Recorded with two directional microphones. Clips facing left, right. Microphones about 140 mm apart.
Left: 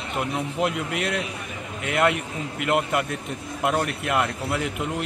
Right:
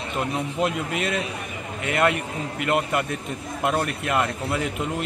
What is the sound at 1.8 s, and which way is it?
A man's voice, 5° left (ahead or behind).